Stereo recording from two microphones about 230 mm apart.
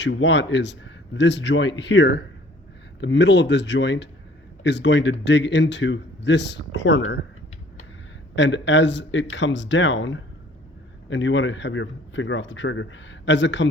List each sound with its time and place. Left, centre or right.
0.0 s speech: left
8.4 s speech: left